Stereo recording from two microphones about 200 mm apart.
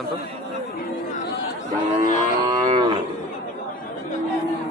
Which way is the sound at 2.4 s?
20° right (ahead or behind).